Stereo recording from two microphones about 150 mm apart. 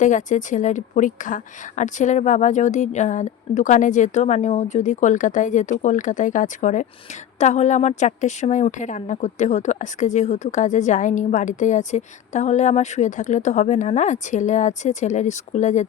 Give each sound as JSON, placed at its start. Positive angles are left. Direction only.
{"t": 0.0, "sound": "a woman's voice", "side_deg": 55}